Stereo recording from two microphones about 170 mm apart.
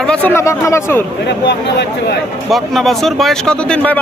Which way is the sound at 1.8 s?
70° left (ahead or behind).